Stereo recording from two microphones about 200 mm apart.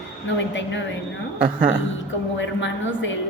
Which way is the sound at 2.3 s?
65° left (ahead or behind).